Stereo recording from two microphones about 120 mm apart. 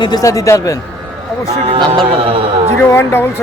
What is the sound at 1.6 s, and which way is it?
Speech, 45° right (ahead or behind).